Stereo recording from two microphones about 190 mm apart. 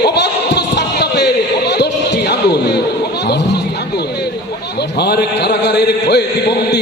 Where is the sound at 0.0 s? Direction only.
60° left (ahead or behind).